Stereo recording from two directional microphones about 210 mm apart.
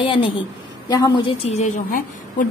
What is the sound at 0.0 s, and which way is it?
A woman's voice, 25° left (ahead or behind).